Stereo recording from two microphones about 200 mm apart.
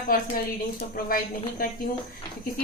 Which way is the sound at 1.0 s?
45° left (ahead or behind).